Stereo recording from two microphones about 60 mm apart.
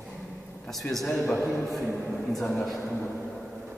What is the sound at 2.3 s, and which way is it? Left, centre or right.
Speech, centre.